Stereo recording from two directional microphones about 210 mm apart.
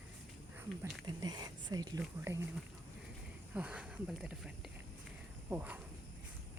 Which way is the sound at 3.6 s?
5° right (ahead or behind).